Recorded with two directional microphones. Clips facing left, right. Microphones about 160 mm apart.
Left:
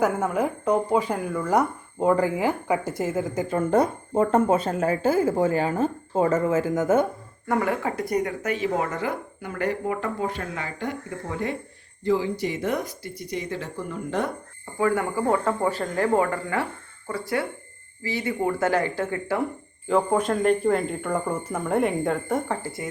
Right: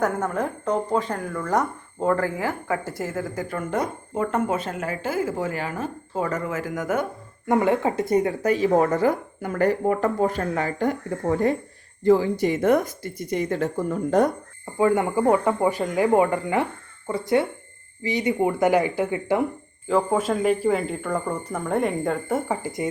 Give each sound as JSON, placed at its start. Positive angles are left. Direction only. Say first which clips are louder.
{"t": 0.0, "sound": "speech", "louder": "left 1 dB", "side_deg": 10}
{"t": 3.7, "sound": "speech", "louder": "left 5 dB", "side_deg": 35}
{"t": 7.4, "sound": "speech", "louder": "right 4 dB", "side_deg": -20}
{"t": 14.8, "sound": "speech", "louder": "right 3 dB", "side_deg": -20}
{"t": 19.9, "sound": "speech", "louder": "even", "side_deg": 0}
{"t": 22.6, "sound": "speech", "louder": "right 5 dB", "side_deg": -20}